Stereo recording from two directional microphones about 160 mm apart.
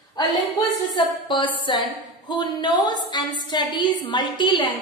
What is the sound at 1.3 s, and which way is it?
A woman's voice, 30° left (ahead or behind).